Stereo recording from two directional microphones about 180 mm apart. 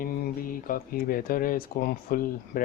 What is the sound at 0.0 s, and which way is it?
Speech, 50° left (ahead or behind).